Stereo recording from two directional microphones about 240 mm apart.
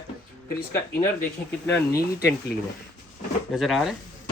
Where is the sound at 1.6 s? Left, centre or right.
Centre.